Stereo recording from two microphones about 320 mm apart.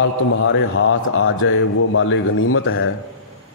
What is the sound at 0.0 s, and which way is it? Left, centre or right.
A man's voice, left.